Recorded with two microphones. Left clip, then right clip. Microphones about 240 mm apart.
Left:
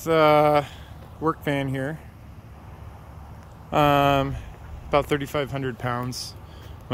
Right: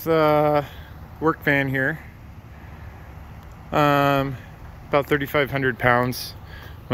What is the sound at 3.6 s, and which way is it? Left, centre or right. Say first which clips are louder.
Speech: even; centre.